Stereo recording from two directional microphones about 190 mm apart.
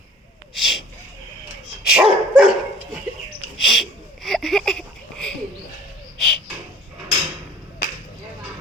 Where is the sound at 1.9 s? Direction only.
5° right (ahead or behind).